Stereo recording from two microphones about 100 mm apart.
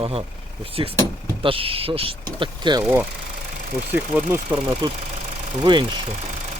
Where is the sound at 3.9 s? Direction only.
20° right (ahead or behind).